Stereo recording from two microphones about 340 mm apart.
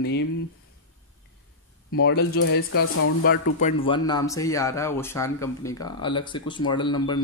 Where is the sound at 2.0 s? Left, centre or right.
Left.